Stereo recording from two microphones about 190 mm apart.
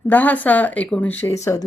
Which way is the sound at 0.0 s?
10° left (ahead or behind).